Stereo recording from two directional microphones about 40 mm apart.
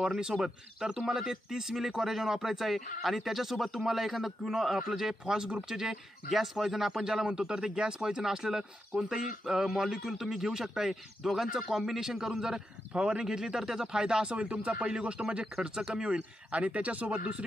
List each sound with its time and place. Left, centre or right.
0.0 s a man's voice: centre
7.2 s a man's voice: right